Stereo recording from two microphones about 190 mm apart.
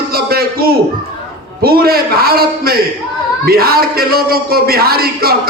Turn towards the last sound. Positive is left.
turn(degrees=-55)  # may be behind; listen again after turning